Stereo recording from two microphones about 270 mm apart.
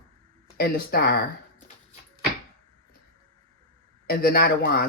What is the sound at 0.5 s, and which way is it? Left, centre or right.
Speech, left.